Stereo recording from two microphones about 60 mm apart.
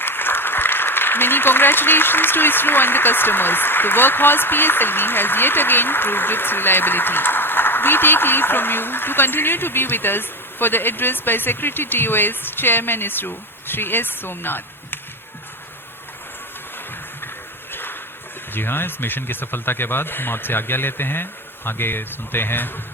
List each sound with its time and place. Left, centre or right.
0.0 s speech: left
17.7 s a sound: left
18.5 s speech: left